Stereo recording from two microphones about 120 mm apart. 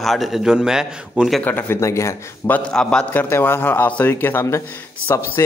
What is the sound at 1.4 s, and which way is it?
Speech, 15° left (ahead or behind).